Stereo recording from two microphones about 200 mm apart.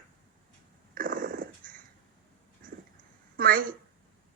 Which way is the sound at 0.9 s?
45° right (ahead or behind).